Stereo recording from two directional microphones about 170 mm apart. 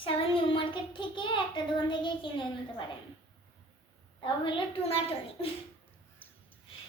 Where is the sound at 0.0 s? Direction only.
30° left (ahead or behind).